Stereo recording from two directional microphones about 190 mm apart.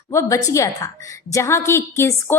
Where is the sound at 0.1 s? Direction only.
15° left (ahead or behind).